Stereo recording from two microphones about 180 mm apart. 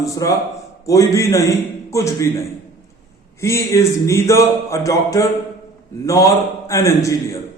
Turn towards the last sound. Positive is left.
turn(degrees=15)  # may be behind; listen again after turning